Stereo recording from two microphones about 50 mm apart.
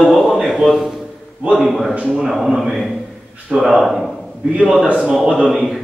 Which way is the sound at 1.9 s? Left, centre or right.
Right.